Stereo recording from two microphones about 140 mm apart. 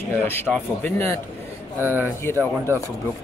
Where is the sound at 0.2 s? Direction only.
15° left (ahead or behind).